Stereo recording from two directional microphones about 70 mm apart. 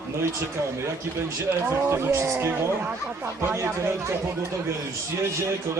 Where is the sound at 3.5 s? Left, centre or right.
Right.